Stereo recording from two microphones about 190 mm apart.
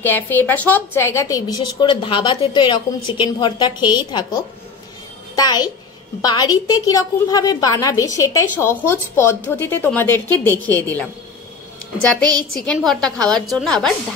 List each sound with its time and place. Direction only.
0.0 s a woman's voice: 10° left (ahead or behind)